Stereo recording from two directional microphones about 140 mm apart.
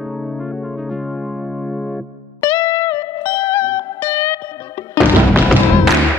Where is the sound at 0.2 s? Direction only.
Centre (ahead or behind).